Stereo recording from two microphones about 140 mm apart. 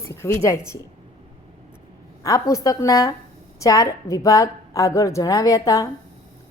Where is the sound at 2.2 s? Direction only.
25° left (ahead or behind).